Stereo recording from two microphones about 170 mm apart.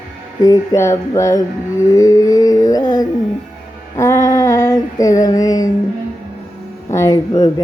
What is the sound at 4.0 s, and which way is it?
Female singing, 15° left (ahead or behind).